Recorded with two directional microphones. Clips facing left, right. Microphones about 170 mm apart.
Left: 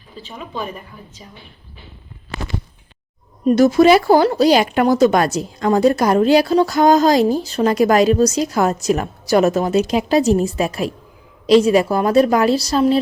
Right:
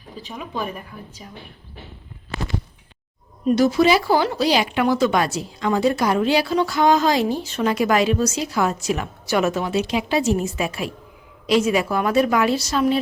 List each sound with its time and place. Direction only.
0.2 s speech: 10° right (ahead or behind)
3.4 s speech: 45° left (ahead or behind)